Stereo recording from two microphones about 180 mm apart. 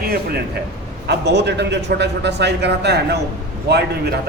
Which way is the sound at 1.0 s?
70° right (ahead or behind).